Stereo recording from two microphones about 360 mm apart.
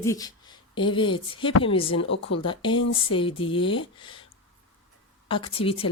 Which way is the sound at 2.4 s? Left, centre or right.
Centre.